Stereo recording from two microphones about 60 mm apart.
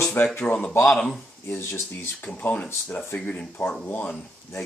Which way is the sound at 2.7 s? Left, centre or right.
Left.